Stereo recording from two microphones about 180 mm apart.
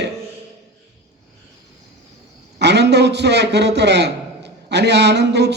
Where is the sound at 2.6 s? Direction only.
70° right (ahead or behind).